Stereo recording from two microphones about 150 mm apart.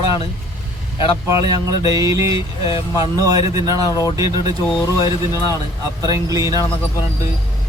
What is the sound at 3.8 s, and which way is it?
Speech, 25° left (ahead or behind).